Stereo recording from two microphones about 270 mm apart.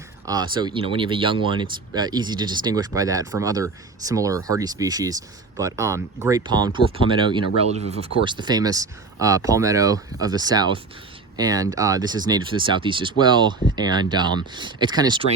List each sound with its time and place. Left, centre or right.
0.3 s speech: centre